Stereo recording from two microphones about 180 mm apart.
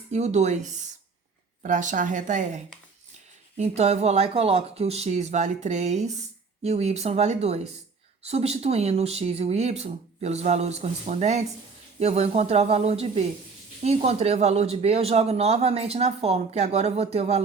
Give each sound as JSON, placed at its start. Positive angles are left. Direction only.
{"t": 0.1, "sound": "speech", "side_deg": -40}
{"t": 3.6, "sound": "speech", "side_deg": -35}